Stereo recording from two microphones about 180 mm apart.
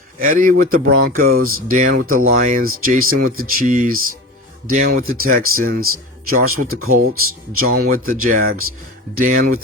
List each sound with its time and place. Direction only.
0.2 s speech: 50° right (ahead or behind)